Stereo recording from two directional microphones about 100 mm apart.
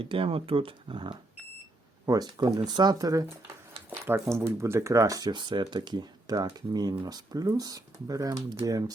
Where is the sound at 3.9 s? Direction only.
25° right (ahead or behind).